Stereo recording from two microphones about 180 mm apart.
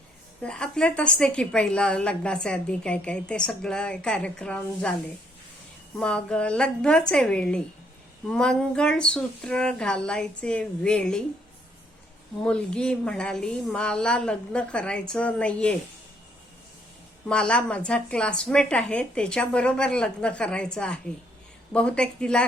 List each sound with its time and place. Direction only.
0.4 s a woman's voice: 5° left (ahead or behind)
6.0 s a woman's voice: 5° left (ahead or behind)
12.4 s a woman's voice: 5° left (ahead or behind)
17.2 s a woman's voice: 5° left (ahead or behind)